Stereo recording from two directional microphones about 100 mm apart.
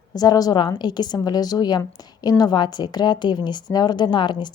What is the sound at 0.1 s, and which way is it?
A woman's voice, 40° left (ahead or behind).